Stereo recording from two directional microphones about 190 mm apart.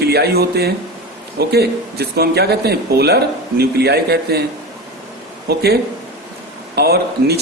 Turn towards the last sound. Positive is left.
turn(degrees=-55)  # may be behind; listen again after turning